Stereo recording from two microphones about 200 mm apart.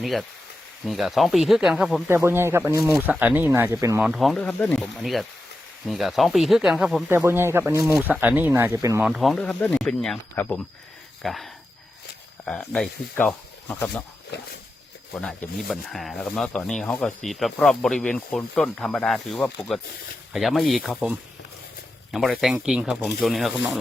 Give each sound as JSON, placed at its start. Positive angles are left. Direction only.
{"t": 0.0, "sound": "speech", "side_deg": 0}
{"t": 4.0, "sound": "speech", "side_deg": 0}
{"t": 9.0, "sound": "speech", "side_deg": 0}
{"t": 14.3, "sound": "speech", "side_deg": 55}
{"t": 15.1, "sound": "speech", "side_deg": 5}